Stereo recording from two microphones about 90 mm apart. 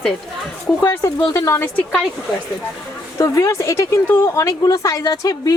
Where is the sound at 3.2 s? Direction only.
35° left (ahead or behind).